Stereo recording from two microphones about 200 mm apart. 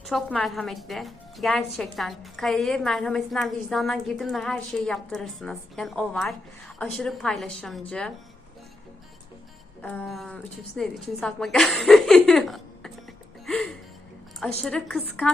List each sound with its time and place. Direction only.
0.0 s a woman's voice: 5° left (ahead or behind)
9.8 s a woman's voice: 5° left (ahead or behind)
13.4 s music: 5° left (ahead or behind)
14.6 s a woman's voice: 5° left (ahead or behind)